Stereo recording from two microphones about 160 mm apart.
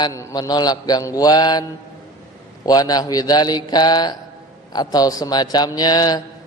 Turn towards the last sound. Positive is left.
turn(degrees=25)  # may be behind; listen again after turning